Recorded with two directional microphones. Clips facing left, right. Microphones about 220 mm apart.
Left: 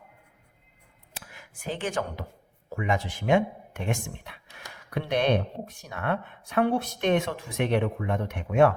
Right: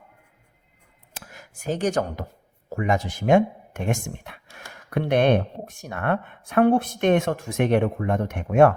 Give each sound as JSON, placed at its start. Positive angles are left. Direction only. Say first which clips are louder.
{"t": 1.2, "sound": "speech", "louder": "right 5 dB", "side_deg": -45}